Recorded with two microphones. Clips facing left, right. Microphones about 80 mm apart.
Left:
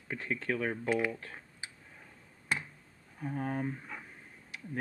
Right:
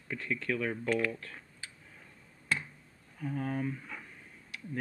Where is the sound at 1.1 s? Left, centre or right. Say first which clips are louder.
Left 1 dB; left.